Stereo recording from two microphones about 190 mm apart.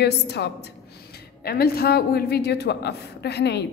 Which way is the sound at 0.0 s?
60° left (ahead or behind).